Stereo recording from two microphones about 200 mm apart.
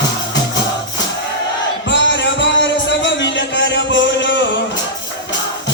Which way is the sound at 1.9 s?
65° left (ahead or behind).